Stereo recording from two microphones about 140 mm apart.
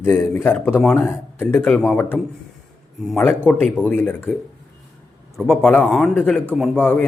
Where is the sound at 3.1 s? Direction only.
5° left (ahead or behind).